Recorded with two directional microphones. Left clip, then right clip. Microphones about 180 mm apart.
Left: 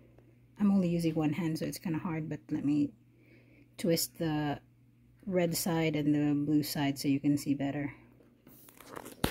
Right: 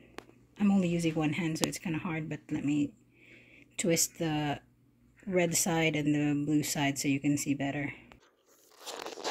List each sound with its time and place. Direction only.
0.6 s speech: 5° left (ahead or behind)
4.2 s speech: centre (ahead or behind)